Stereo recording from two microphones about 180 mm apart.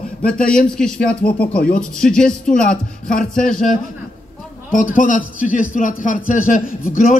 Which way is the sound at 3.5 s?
50° left (ahead or behind).